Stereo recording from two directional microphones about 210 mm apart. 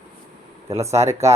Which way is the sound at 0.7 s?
15° right (ahead or behind).